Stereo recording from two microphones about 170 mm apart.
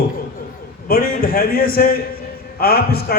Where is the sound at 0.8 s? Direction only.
60° left (ahead or behind).